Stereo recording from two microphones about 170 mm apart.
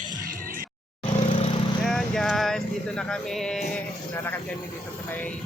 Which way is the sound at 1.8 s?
Centre (ahead or behind).